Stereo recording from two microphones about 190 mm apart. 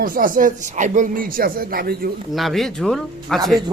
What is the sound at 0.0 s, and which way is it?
Speech, 45° right (ahead or behind).